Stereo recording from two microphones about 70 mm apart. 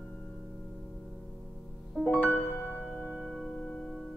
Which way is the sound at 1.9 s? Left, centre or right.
Centre.